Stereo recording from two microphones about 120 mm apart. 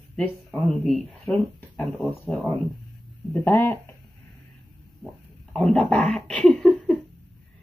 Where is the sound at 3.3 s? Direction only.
15° left (ahead or behind).